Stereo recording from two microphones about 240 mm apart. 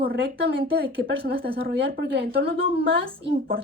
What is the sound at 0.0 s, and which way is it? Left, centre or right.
A woman's voice, right.